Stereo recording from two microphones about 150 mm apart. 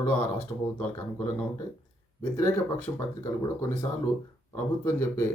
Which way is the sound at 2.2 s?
10° left (ahead or behind).